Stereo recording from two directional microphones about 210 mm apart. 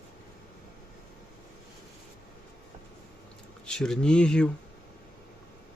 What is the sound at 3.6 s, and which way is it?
Speech, 5° left (ahead or behind).